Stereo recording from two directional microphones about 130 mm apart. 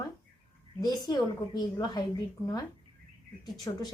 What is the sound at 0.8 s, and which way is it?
A woman's voice, 30° left (ahead or behind).